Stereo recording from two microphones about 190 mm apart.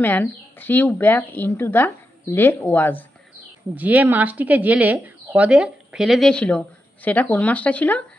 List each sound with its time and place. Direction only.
0.0 s speech: 10° left (ahead or behind)
3.7 s speech: 10° right (ahead or behind); by 8.0 s 5° left (ahead or behind)